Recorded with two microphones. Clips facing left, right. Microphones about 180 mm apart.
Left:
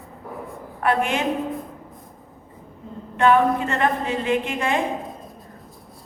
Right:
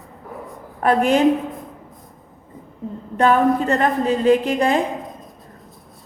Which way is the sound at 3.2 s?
40° right (ahead or behind).